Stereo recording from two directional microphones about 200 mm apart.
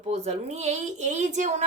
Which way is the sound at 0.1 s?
35° right (ahead or behind).